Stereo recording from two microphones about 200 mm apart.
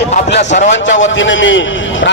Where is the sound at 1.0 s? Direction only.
70° left (ahead or behind).